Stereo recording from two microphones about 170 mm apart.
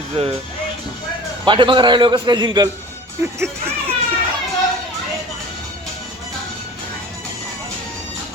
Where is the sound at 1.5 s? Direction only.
30° right (ahead or behind).